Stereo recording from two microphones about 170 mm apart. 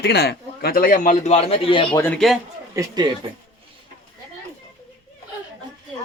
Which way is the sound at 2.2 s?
Centre (ahead or behind).